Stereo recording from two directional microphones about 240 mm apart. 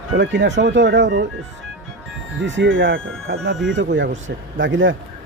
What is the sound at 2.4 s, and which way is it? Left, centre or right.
Speech, right.